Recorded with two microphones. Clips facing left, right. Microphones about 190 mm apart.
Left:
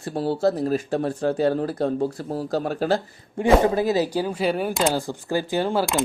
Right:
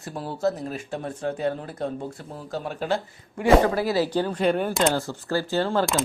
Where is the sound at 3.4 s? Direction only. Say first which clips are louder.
Left 1 dB; 20° left (ahead or behind).